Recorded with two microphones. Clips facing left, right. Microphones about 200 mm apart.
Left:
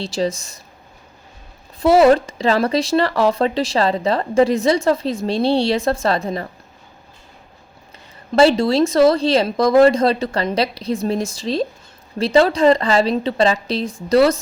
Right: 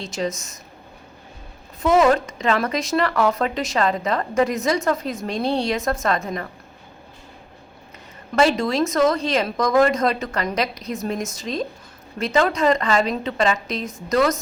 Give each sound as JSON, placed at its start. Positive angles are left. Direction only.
{"t": 0.0, "sound": "speech", "side_deg": 30}
{"t": 1.8, "sound": "speech", "side_deg": 35}
{"t": 8.4, "sound": "speech", "side_deg": 30}